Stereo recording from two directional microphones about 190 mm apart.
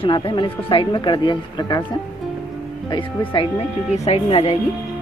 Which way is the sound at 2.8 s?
25° left (ahead or behind).